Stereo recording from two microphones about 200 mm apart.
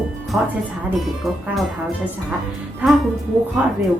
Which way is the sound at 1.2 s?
Centre (ahead or behind).